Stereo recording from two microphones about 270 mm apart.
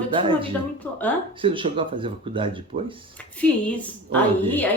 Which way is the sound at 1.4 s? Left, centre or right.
Centre.